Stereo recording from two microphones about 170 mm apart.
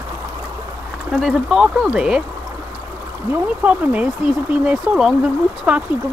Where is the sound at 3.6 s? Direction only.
10° right (ahead or behind).